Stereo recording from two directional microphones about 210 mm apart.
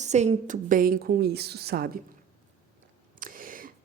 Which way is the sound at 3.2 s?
40° right (ahead or behind).